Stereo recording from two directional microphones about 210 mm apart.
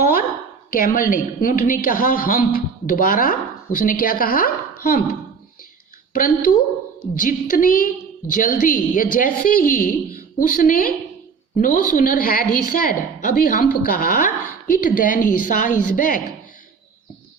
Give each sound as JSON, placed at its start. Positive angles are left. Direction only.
{"t": 0.0, "sound": "a sound", "side_deg": 45}
{"t": 0.7, "sound": "a woman's voice", "side_deg": 40}
{"t": 6.1, "sound": "a woman's voice", "side_deg": 40}